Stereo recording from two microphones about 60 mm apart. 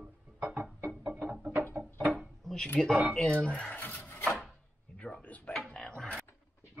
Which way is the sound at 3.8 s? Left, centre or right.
Left.